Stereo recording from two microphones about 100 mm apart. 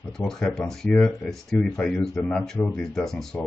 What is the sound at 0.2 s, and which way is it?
Speech, 5° left (ahead or behind).